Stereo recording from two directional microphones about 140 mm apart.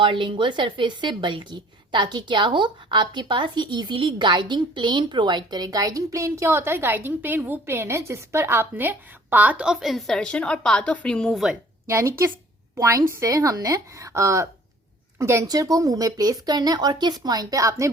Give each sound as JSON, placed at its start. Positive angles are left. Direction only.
{"t": 0.0, "sound": "a woman's voice", "side_deg": -35}
{"t": 11.9, "sound": "a woman's voice", "side_deg": -20}